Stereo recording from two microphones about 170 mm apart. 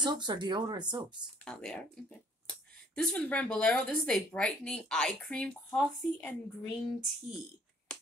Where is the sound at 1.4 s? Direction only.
5° left (ahead or behind).